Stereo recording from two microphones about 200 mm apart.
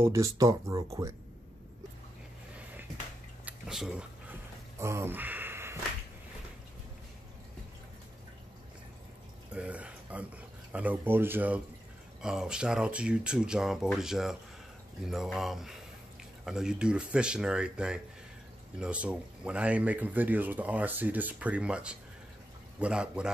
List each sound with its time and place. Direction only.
0.0 s speech: 15° right (ahead or behind)
3.4 s a sound: centre (ahead or behind)
9.5 s speech: 5° right (ahead or behind)